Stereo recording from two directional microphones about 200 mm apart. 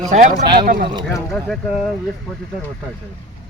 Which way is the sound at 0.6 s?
45° right (ahead or behind).